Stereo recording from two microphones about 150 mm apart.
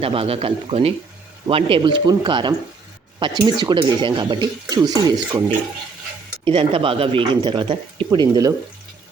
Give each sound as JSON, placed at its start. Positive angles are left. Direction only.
{"t": 0.0, "sound": "speech", "side_deg": -40}